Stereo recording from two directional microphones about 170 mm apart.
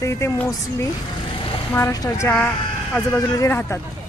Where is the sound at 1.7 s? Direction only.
15° left (ahead or behind).